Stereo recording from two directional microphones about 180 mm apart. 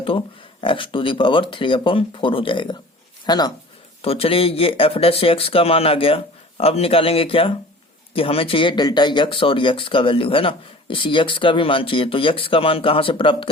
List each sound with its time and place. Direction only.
0.6 s speech: 30° left (ahead or behind)
4.0 s speech: 35° left (ahead or behind)